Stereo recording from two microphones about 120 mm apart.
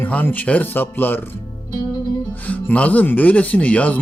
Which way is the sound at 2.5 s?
10° left (ahead or behind).